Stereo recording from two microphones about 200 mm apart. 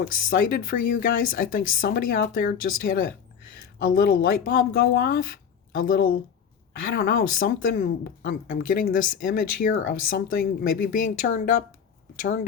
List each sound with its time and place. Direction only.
0.0 s speech: 45° left (ahead or behind)